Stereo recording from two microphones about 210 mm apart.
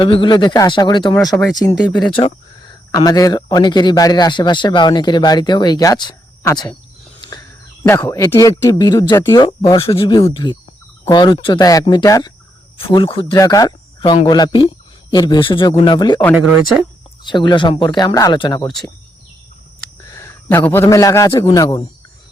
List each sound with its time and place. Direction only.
0.0 s speech: 25° left (ahead or behind)
7.2 s a sound: 20° left (ahead or behind)
7.9 s speech: 10° left (ahead or behind)
17.2 s speech: 20° left (ahead or behind)
20.1 s a man's voice: 15° left (ahead or behind)